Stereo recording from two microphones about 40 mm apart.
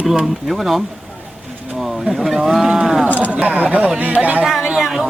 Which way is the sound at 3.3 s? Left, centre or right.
Right.